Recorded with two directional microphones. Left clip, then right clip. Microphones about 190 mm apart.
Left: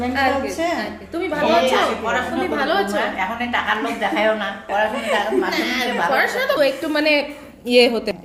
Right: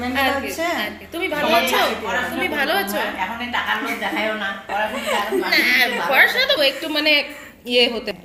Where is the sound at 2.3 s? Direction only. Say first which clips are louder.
Left 1 dB; 20° left (ahead or behind).